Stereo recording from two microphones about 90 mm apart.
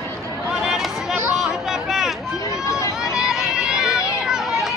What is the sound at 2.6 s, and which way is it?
Run, 35° left (ahead or behind).